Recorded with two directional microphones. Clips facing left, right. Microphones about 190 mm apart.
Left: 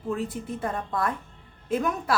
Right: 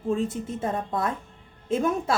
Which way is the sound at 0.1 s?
25° right (ahead or behind).